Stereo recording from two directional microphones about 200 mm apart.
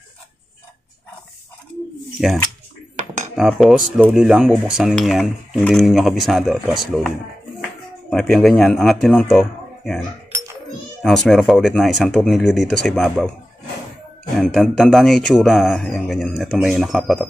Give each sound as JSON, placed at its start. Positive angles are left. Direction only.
{"t": 2.1, "sound": "speech", "side_deg": 0}
{"t": 8.1, "sound": "speech", "side_deg": 0}
{"t": 14.3, "sound": "speech", "side_deg": 0}